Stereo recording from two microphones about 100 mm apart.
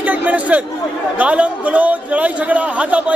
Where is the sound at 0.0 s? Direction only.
15° right (ahead or behind).